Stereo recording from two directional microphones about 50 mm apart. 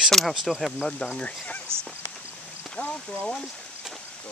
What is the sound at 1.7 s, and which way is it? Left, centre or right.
Speech, right.